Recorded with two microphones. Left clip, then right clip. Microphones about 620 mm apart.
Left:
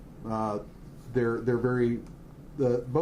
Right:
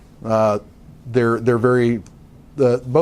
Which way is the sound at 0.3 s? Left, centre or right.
Right.